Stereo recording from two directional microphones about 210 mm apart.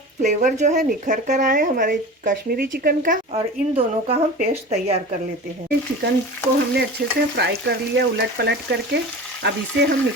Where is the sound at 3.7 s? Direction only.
30° right (ahead or behind).